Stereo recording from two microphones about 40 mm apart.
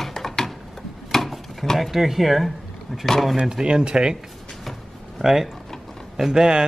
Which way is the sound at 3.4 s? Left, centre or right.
Right.